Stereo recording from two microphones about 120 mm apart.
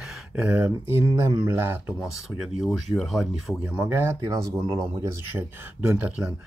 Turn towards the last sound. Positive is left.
turn(degrees=-10)  # may be behind; listen again after turning